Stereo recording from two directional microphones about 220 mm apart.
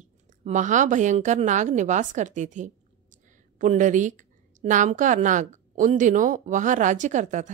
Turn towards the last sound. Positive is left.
turn(degrees=-35)  # may be behind; listen again after turning